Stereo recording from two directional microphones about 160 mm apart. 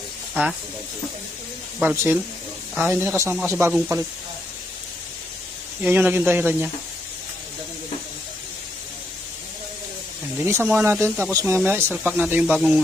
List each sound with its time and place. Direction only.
1.8 s speech: 15° right (ahead or behind)
5.8 s speech: 10° right (ahead or behind)
10.3 s speech: 15° right (ahead or behind)